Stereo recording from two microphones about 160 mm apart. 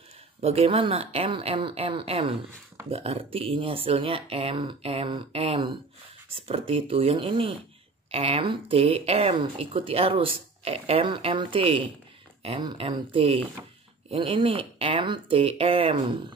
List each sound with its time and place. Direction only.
0.4 s speech: 40° right (ahead or behind)